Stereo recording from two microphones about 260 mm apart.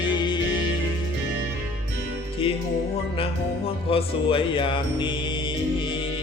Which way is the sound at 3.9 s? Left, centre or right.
Left.